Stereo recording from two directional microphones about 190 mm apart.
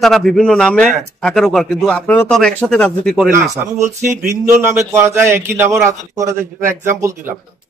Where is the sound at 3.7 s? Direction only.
15° right (ahead or behind).